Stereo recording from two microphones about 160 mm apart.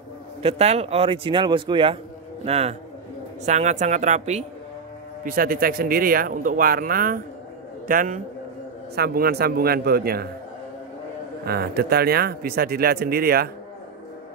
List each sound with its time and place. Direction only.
0.4 s a man's voice: 40° right (ahead or behind)
5.2 s a man's voice: 65° right (ahead or behind)
8.9 s speech: 75° right (ahead or behind)
11.4 s speech: 80° right